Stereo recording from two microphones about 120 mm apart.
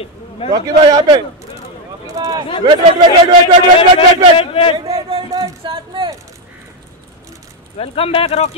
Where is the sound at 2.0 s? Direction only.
30° right (ahead or behind).